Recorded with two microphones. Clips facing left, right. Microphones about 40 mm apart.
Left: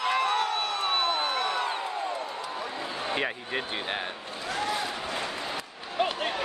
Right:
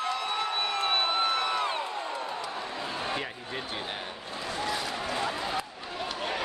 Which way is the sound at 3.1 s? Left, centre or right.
Left.